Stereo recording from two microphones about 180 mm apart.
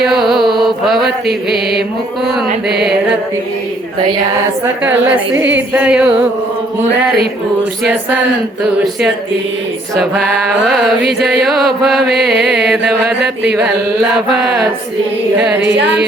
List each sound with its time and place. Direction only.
0.0 s mantra: centre (ahead or behind)
4.6 s speech: 10° right (ahead or behind)
9.9 s music: centre (ahead or behind)
15.6 s carnatic music: 80° right